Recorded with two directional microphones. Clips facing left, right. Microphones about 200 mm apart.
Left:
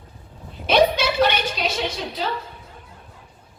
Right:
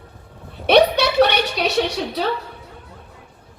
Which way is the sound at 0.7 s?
65° right (ahead or behind).